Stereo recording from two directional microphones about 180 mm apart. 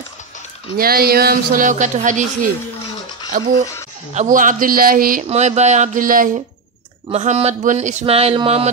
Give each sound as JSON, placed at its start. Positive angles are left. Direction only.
{"t": 0.7, "sound": "speech", "side_deg": -55}
{"t": 3.3, "sound": "speech", "side_deg": -50}
{"t": 5.2, "sound": "speech", "side_deg": -35}
{"t": 7.1, "sound": "speech", "side_deg": -40}